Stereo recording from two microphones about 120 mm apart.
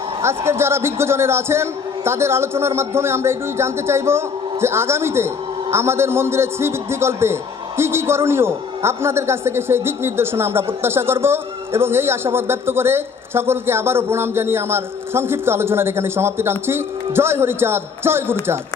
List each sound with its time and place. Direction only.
0.2 s a man's voice: 20° right (ahead or behind)